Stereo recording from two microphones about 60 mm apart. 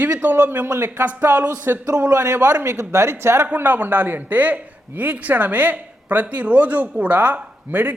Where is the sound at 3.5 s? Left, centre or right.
Right.